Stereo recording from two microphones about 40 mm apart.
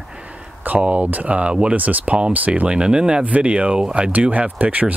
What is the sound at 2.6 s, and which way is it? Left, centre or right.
Speech, right.